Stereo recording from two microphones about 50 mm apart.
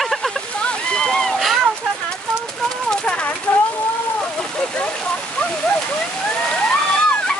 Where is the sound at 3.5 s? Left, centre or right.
Left.